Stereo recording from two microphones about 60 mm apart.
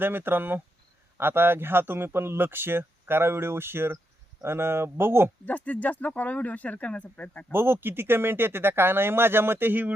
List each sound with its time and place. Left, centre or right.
0.0 s a man's voice: right
5.5 s speech: left
7.5 s a man's voice: right